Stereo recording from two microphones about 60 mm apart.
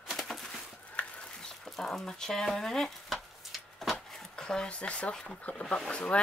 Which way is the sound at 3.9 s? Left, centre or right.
Centre.